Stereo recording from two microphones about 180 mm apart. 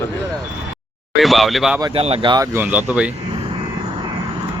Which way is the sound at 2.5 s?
10° right (ahead or behind).